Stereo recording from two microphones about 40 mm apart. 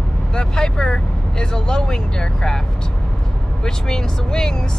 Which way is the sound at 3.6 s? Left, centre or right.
Centre.